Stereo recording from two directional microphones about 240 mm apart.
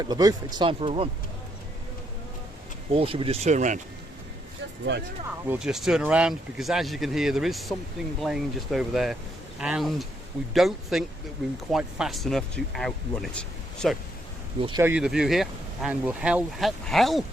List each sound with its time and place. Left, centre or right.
0.0 s speech: centre
2.9 s speech: right
4.9 s speech: right
5.5 s speech: centre
14.6 s speech: centre